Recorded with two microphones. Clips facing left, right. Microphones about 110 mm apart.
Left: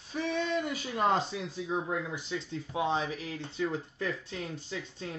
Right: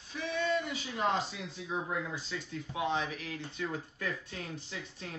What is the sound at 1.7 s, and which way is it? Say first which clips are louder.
Speech: left 2 dB; 20° left (ahead or behind).